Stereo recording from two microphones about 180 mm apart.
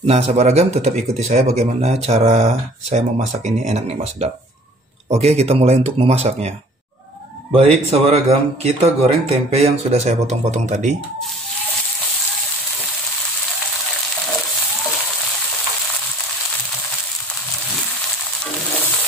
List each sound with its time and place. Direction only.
0.0 s speech: 35° right (ahead or behind)
7.5 s speech: 35° right (ahead or behind)